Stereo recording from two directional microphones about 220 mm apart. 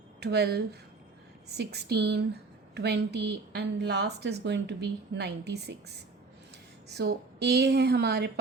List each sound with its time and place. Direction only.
0.2 s speech: 50° right (ahead or behind)